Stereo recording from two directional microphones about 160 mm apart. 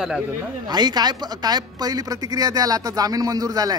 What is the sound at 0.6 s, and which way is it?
A woman's voice, 25° right (ahead or behind).